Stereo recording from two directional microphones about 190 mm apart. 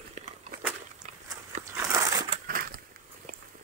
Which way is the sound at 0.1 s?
40° right (ahead or behind).